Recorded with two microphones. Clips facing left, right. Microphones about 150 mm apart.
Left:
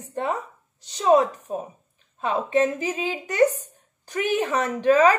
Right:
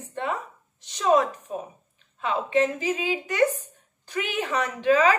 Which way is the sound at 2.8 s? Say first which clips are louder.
Right 1 dB; 40° left (ahead or behind).